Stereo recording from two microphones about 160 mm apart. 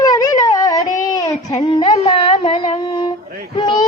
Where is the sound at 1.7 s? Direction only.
35° left (ahead or behind).